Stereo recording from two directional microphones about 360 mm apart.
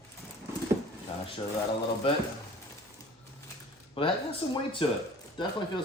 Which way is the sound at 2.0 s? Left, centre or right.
Centre.